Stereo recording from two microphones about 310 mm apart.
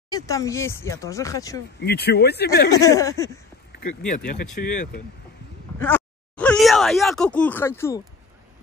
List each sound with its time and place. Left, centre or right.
0.1 s speech: centre
1.8 s speech: left
2.7 s speech: centre
4.6 s speech: left
5.8 s speech: centre